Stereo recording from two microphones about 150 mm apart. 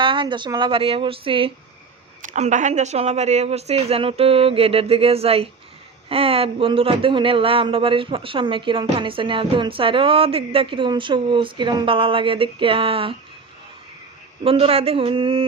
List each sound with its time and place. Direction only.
0.0 s speech: 35° right (ahead or behind)
2.2 s speech: 55° right (ahead or behind); by 13.1 s 35° right (ahead or behind)
14.4 s speech: 40° right (ahead or behind)